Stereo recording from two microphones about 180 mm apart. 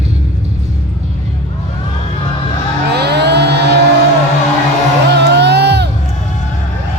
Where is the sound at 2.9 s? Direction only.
65° right (ahead or behind).